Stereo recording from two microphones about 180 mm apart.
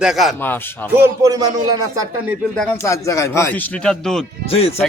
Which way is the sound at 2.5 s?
15° left (ahead or behind).